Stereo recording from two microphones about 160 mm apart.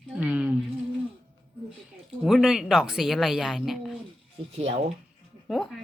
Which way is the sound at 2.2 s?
Centre (ahead or behind).